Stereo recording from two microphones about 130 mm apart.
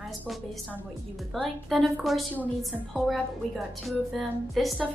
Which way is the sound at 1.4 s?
Centre (ahead or behind).